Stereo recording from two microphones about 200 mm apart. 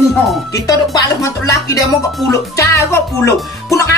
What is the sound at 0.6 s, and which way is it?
Speech, 15° left (ahead or behind).